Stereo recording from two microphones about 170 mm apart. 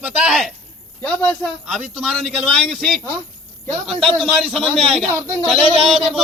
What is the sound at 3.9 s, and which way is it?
A man's voice, centre (ahead or behind).